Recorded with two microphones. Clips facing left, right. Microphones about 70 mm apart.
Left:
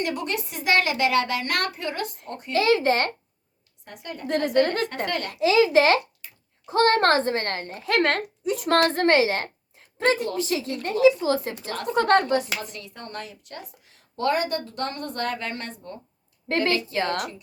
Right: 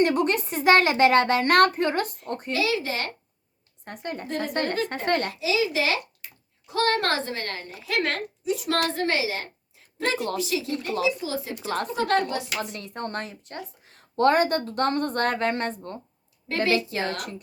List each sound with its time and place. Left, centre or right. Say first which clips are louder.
0.0 s speech: right 6 dB; right
2.5 s a woman's voice: left 6 dB; left
3.8 s speech: right 3 dB; right
4.3 s a woman's voice: left 7 dB; left
5.0 s speech: right 4 dB; right
5.3 s a woman's voice: left 7 dB; left
6.7 s a woman's voice: left 5 dB; left
12.5 s speech: right 4 dB; right
16.9 s a woman's voice: left 3 dB; left